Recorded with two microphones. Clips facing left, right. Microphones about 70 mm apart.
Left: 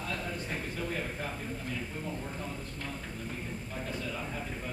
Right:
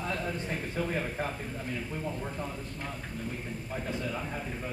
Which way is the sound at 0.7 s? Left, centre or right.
Right.